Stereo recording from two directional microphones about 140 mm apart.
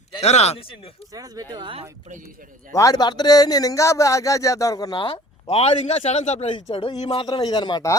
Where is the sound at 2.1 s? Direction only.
70° right (ahead or behind).